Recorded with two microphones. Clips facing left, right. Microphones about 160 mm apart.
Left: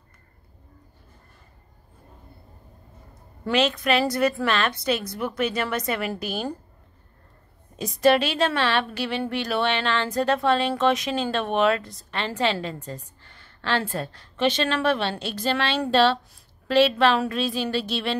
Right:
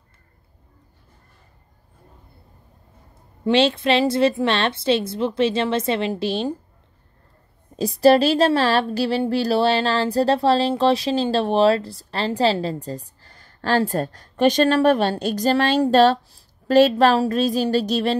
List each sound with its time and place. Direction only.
3.4 s a woman's voice: 30° right (ahead or behind)
7.7 s speech: 35° right (ahead or behind)